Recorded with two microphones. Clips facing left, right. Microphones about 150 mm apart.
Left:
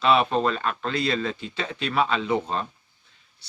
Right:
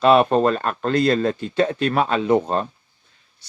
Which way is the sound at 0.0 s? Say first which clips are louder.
Right 6 dB; 45° right (ahead or behind).